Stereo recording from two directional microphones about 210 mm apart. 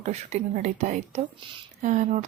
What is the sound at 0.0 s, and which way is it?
Speech, 30° right (ahead or behind).